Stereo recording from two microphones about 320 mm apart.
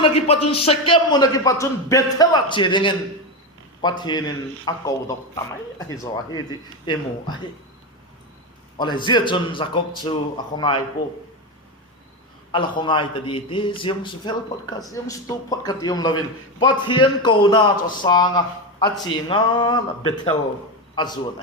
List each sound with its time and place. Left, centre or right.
0.0 s a man's voice: centre
8.8 s a man's voice: centre
12.5 s a man's voice: centre